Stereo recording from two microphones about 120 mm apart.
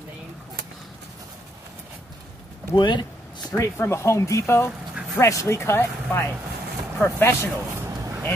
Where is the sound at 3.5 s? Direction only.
25° left (ahead or behind).